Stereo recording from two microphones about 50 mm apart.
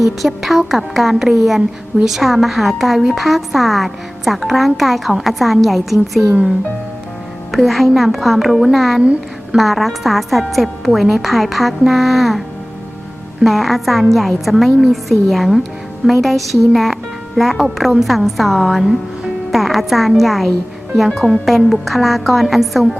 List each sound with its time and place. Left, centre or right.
0.0 s a woman's voice: centre
7.5 s a woman's voice: centre
9.0 s a woman's voice: centre
9.6 s a woman's voice: centre
13.4 s a woman's voice: centre